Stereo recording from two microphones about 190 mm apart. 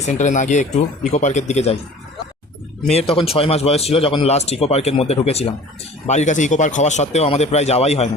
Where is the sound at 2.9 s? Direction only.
30° left (ahead or behind).